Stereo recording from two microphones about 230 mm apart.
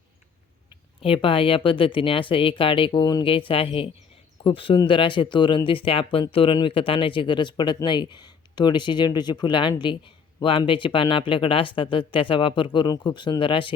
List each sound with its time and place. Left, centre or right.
1.0 s speech: left